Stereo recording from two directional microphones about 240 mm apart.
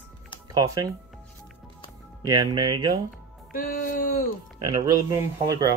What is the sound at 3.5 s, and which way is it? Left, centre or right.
Speech, left.